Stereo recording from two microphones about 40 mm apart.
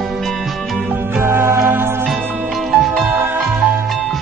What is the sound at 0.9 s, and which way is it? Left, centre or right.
Music, right.